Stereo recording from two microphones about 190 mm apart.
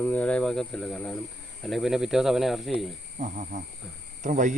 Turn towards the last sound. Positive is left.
turn(degrees=-40)  # may be behind; listen again after turning